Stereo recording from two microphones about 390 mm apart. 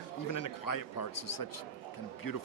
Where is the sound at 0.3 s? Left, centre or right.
Left.